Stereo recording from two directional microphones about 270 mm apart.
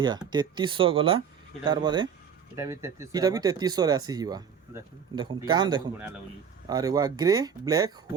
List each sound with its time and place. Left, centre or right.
0.0 s speech: centre